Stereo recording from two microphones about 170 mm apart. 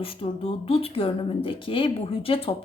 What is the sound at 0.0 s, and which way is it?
A woman's voice, 35° left (ahead or behind).